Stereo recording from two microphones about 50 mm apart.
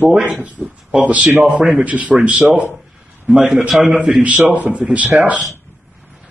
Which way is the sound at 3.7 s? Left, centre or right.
Centre.